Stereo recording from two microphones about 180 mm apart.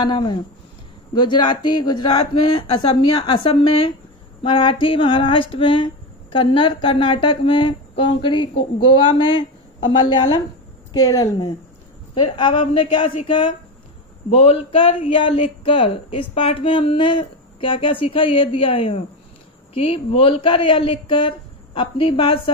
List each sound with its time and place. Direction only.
0.0 s speech: 25° left (ahead or behind)